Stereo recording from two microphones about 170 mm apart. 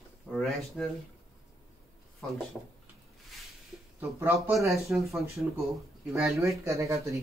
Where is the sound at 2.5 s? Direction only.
Centre (ahead or behind).